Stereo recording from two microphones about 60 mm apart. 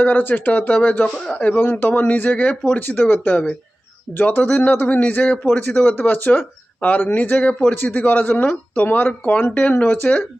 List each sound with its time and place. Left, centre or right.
0.0 s speech: left
1.5 s speech: left